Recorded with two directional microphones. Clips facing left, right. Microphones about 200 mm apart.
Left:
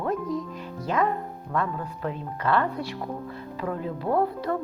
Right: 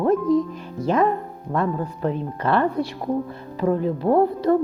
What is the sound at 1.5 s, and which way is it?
A woman's voice, 30° right (ahead or behind).